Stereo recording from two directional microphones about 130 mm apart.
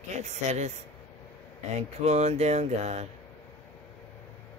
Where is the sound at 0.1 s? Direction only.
60° right (ahead or behind).